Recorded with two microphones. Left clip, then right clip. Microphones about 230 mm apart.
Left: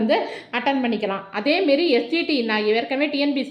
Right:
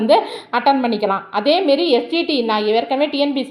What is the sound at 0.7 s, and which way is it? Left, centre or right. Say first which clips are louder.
Speech: right 7 dB; right.